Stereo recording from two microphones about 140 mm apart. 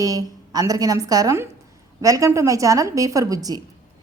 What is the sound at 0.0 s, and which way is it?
A woman's voice, 25° right (ahead or behind).